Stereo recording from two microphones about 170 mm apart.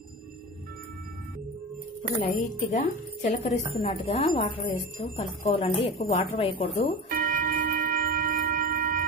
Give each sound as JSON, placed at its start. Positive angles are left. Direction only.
{"t": 2.2, "sound": "a woman's voice", "side_deg": 40}
{"t": 7.1, "sound": "shofar", "side_deg": -55}